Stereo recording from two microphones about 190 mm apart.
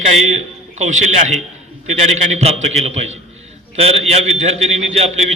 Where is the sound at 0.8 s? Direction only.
40° right (ahead or behind).